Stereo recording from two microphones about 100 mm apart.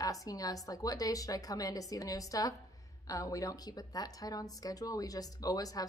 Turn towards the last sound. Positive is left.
turn(degrees=40)  # may be behind; listen again after turning